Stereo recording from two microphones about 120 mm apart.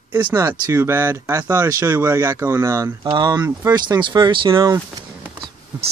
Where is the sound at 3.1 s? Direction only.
35° right (ahead or behind).